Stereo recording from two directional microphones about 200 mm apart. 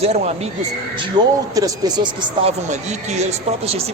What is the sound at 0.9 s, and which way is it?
Speech, 20° right (ahead or behind).